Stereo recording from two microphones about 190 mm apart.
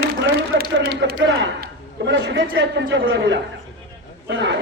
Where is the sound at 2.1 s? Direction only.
70° right (ahead or behind).